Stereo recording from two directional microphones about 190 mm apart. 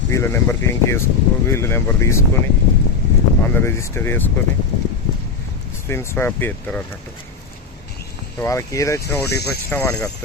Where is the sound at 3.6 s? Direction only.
10° left (ahead or behind).